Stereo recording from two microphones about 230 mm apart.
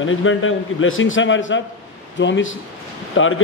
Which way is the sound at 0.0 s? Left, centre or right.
Left.